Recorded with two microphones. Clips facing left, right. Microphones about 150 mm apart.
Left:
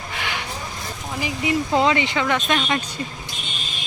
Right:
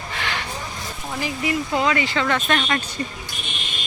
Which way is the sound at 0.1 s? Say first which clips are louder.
Right 1 dB; 15° left (ahead or behind).